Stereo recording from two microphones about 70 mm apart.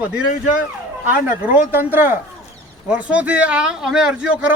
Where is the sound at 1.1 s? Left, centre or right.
Right.